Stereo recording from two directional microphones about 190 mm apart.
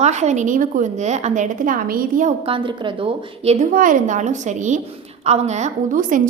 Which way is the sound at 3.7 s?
45° right (ahead or behind).